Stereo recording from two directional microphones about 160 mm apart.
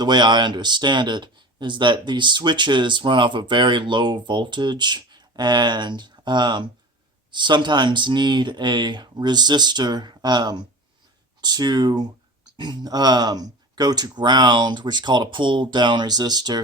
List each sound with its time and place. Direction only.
0.0 s speech: 25° right (ahead or behind)